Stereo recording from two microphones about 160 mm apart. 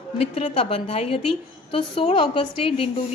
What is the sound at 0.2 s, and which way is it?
A woman's voice, 35° left (ahead or behind).